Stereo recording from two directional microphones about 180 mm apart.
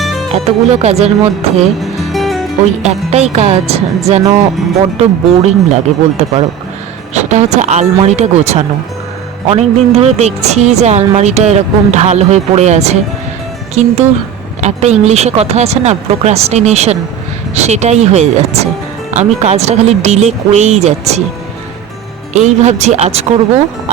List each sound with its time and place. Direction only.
0.3 s a woman's voice: 35° right (ahead or behind)
1.8 s music: centre (ahead or behind)
2.8 s a woman's voice: 35° right (ahead or behind)
14.6 s a woman's voice: 40° right (ahead or behind)
22.3 s a woman's voice: 40° right (ahead or behind)